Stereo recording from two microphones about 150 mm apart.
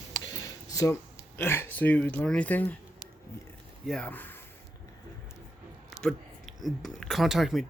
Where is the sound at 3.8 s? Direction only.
5° left (ahead or behind).